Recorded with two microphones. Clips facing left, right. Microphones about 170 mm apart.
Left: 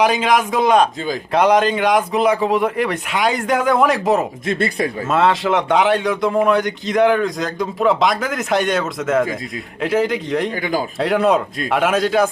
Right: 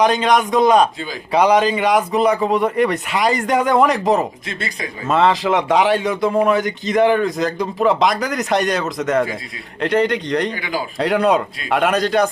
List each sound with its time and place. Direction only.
0.0 s a man's voice: 5° left (ahead or behind)
4.4 s speech: 55° left (ahead or behind)
5.0 s a man's voice: centre (ahead or behind)
10.5 s speech: 45° left (ahead or behind)
11.0 s a man's voice: centre (ahead or behind)